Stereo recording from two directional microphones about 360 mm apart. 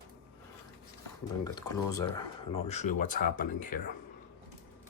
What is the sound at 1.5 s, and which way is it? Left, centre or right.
Speech, centre.